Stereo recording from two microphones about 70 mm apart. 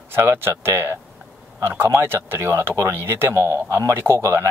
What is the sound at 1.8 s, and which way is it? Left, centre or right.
Speech, right.